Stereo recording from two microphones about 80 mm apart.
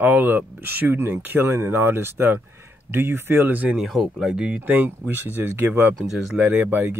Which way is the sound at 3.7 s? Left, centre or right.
Centre.